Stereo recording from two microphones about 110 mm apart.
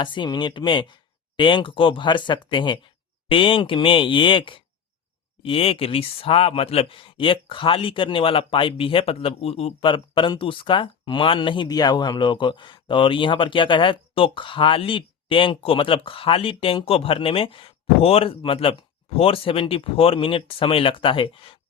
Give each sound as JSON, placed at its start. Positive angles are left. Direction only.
{"t": 0.0, "sound": "speech", "side_deg": 45}
{"t": 9.8, "sound": "speech", "side_deg": 45}